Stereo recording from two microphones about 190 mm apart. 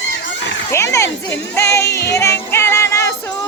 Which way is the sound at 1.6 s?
15° left (ahead or behind).